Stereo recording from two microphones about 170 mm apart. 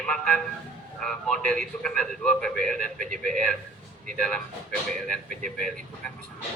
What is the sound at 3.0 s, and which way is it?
Speech, 45° right (ahead or behind).